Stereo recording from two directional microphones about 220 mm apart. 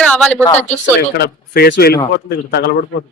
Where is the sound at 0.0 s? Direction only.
5° left (ahead or behind).